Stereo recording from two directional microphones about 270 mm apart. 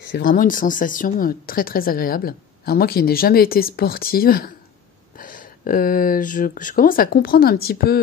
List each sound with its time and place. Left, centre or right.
0.1 s speech: left